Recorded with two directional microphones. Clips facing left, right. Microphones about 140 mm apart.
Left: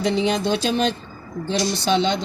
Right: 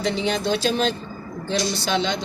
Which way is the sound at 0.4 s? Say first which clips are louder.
Left 1 dB; 40° right (ahead or behind).